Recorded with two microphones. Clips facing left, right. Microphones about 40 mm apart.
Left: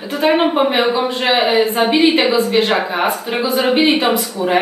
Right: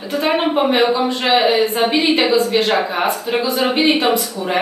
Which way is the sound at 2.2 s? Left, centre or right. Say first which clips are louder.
Even; left.